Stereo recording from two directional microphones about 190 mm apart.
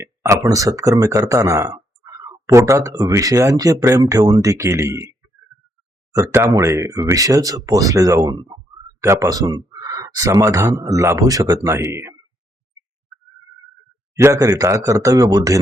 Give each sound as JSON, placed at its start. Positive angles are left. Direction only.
{"t": 0.0, "sound": "speech", "side_deg": -15}
{"t": 6.1, "sound": "speech", "side_deg": -15}
{"t": 14.2, "sound": "speech", "side_deg": -15}